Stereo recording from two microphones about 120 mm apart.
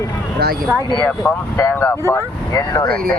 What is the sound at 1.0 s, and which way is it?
Speech, 15° left (ahead or behind).